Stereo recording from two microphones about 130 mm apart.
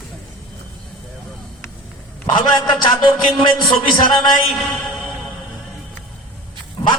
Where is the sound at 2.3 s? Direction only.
35° left (ahead or behind).